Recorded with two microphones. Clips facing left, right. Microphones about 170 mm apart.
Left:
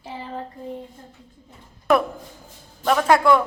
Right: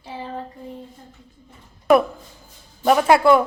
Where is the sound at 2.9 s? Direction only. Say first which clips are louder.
Right 2 dB; 10° right (ahead or behind).